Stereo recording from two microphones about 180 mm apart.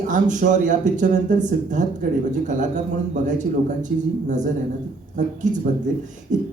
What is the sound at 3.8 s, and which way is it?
Speech, 45° right (ahead or behind).